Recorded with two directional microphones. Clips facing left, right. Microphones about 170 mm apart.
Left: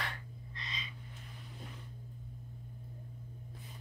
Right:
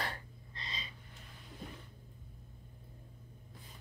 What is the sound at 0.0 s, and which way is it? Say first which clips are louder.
Gasp: right 2 dB; 35° right (ahead or behind).